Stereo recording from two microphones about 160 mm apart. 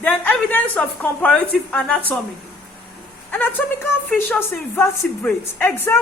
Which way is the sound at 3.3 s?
10° left (ahead or behind).